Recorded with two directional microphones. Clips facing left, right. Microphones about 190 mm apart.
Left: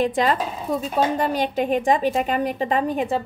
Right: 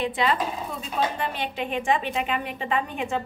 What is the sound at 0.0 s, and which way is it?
A woman's voice, 40° left (ahead or behind).